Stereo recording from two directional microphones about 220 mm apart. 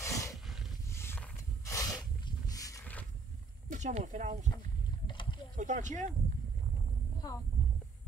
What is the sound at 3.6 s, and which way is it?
Speech, 35° right (ahead or behind).